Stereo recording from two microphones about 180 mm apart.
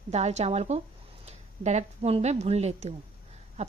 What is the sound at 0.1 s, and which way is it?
A woman's voice, 40° right (ahead or behind).